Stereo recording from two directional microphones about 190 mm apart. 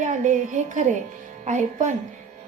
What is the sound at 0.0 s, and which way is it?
A woman's voice, 40° right (ahead or behind).